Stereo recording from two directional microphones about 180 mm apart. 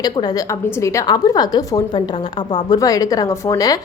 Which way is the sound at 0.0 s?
20° left (ahead or behind).